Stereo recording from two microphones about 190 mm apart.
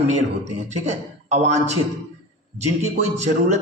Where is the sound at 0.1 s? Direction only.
35° right (ahead or behind).